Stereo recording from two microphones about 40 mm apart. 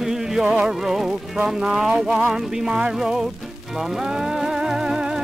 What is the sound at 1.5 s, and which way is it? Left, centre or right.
Music, centre.